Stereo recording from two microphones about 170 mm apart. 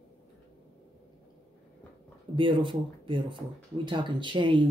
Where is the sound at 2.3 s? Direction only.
30° right (ahead or behind).